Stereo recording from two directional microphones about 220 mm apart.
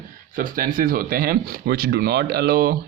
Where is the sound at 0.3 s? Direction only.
40° right (ahead or behind).